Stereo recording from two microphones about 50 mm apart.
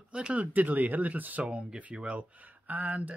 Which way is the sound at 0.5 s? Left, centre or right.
Right.